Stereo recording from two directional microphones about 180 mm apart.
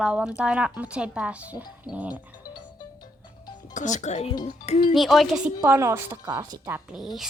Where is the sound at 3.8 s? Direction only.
40° left (ahead or behind).